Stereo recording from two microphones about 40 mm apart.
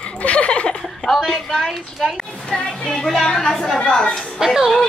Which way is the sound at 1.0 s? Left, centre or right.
Centre.